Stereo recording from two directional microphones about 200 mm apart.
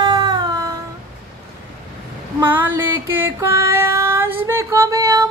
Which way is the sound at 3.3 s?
15° right (ahead or behind).